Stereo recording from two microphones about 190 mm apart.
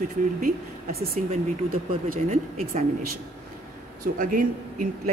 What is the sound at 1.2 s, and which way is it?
Speech, 40° right (ahead or behind).